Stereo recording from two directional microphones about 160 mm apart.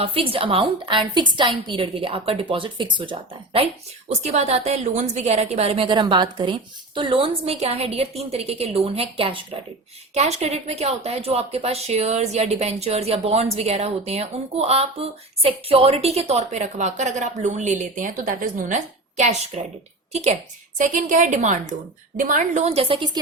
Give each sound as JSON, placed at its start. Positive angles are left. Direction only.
{"t": 0.0, "sound": "a woman's voice", "side_deg": -35}
{"t": 20.7, "sound": "a woman's voice", "side_deg": -55}